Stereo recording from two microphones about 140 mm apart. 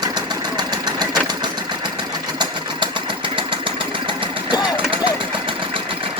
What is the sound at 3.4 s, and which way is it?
Engine, 35° right (ahead or behind).